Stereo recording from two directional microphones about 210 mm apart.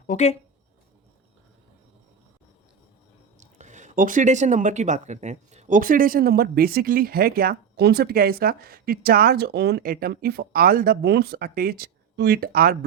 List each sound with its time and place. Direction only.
0.1 s speech: 30° left (ahead or behind)
3.4 s speech: 35° right (ahead or behind)